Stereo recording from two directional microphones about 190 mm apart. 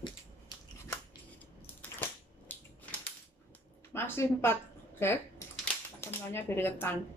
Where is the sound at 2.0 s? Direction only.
10° left (ahead or behind).